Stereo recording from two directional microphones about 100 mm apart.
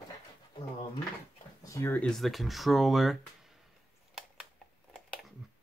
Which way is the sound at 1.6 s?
30° left (ahead or behind).